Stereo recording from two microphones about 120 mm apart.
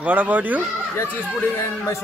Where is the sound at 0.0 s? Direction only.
15° right (ahead or behind).